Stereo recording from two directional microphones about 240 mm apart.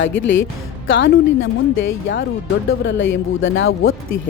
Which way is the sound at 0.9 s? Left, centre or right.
Left.